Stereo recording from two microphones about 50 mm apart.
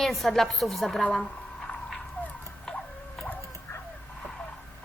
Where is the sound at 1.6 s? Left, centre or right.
Centre.